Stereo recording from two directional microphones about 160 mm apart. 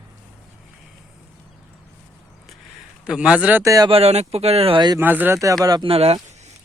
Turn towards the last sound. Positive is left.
turn(degrees=-35)  # may be behind; listen again after turning